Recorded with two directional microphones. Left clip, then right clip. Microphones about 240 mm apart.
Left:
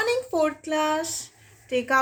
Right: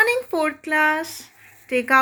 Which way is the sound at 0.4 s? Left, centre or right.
Centre.